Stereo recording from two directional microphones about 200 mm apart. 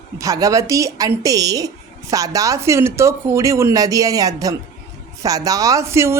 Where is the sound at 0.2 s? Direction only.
15° right (ahead or behind).